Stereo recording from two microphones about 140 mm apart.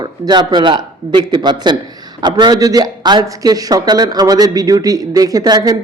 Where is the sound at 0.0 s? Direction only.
30° right (ahead or behind).